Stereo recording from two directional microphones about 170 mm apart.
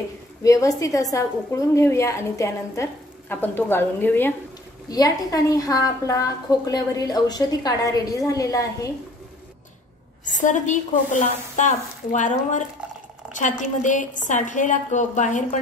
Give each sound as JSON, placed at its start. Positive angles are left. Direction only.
{"t": 0.4, "sound": "a woman's voice", "side_deg": 20}
{"t": 10.2, "sound": "a woman's voice", "side_deg": 50}